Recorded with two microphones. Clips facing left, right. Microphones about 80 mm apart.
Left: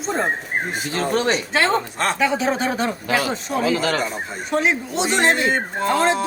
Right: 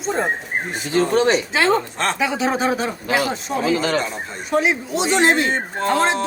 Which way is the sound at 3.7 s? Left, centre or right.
Right.